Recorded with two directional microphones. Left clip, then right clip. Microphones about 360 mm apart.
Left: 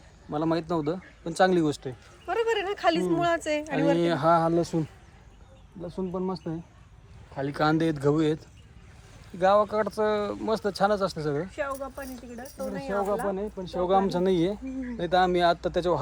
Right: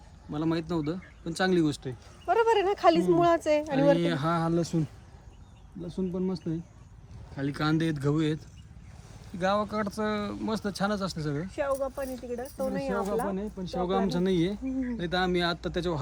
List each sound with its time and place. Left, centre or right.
0.3 s speech: centre
2.2 s speech: right
3.8 s speech: centre
5.9 s speech: centre
11.5 s speech: right
13.3 s speech: centre